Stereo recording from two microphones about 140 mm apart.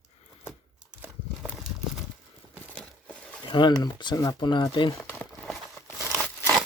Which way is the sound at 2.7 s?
5° left (ahead or behind).